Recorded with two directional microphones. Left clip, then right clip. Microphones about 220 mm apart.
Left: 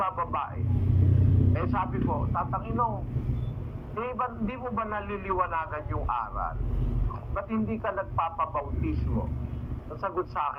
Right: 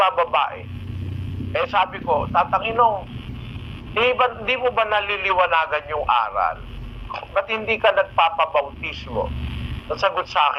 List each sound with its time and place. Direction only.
0.0 s a man's voice: 55° right (ahead or behind)
1.5 s a man's voice: 55° right (ahead or behind)
3.9 s a man's voice: 55° right (ahead or behind)